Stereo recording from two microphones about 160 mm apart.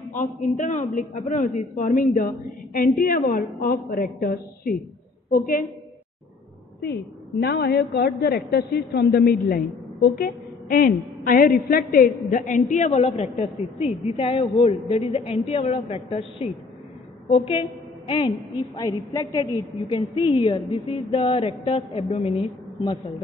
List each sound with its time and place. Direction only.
0.1 s a man's voice: 55° left (ahead or behind)
6.8 s a woman's voice: 90° left; by 22.9 s 35° left (ahead or behind)